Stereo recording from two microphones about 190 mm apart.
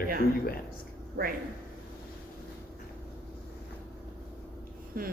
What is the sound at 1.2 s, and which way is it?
Speech, 55° right (ahead or behind).